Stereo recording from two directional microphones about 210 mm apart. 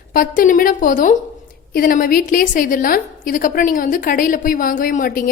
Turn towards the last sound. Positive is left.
turn(degrees=40)  # may be behind; listen again after turning